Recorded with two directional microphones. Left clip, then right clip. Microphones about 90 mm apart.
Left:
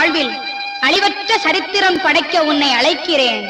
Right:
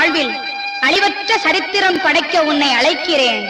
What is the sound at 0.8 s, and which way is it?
Speech, 55° right (ahead or behind).